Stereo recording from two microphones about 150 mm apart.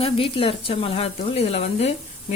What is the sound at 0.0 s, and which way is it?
Speech, 40° left (ahead or behind).